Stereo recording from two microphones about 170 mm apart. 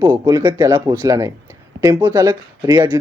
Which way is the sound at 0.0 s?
20° right (ahead or behind).